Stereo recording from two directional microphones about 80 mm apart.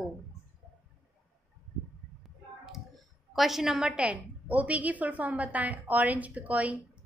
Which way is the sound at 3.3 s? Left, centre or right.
Centre.